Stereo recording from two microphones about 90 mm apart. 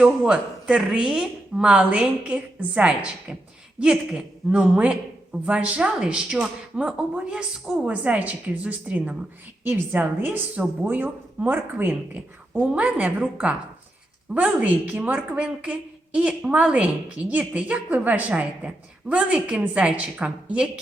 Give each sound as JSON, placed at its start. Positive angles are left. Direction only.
{"t": 0.0, "sound": "a woman's voice", "side_deg": -10}